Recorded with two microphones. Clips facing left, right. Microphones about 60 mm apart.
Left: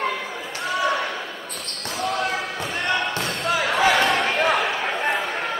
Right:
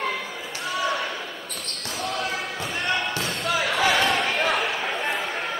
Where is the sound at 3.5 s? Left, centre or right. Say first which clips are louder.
Left 3 dB; left.